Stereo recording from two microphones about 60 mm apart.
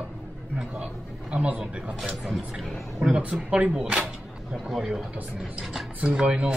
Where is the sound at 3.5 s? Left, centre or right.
Centre.